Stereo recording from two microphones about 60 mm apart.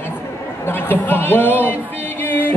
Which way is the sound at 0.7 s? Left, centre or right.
Left.